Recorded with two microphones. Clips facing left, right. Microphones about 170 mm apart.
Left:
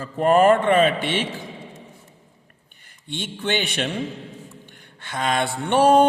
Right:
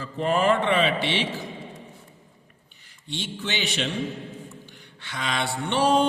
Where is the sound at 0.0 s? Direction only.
50° left (ahead or behind).